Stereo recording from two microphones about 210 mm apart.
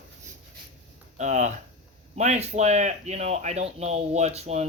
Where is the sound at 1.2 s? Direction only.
35° right (ahead or behind).